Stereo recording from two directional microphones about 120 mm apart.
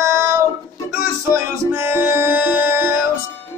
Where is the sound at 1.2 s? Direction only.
20° right (ahead or behind).